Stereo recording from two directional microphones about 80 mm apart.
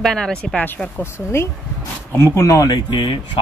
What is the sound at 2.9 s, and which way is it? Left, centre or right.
Speech, left.